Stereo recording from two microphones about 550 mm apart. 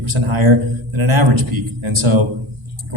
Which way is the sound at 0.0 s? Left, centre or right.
Right.